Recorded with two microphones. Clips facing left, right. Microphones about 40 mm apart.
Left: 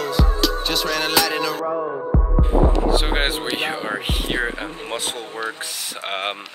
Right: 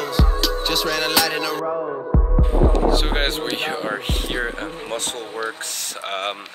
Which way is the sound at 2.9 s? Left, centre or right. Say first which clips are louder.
Even; centre.